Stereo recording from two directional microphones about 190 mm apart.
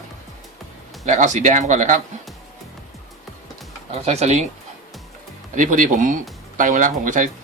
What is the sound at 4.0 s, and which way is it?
Speech, 35° right (ahead or behind).